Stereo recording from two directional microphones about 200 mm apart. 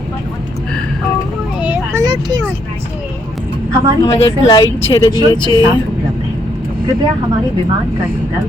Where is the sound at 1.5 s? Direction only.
10° right (ahead or behind).